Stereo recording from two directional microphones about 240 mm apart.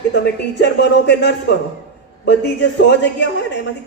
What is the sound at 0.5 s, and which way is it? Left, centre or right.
A man's voice, left.